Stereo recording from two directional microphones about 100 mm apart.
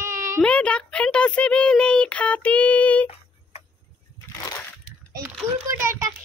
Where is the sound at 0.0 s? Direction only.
30° right (ahead or behind).